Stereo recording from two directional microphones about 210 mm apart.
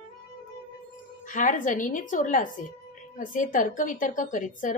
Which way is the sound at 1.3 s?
40° left (ahead or behind).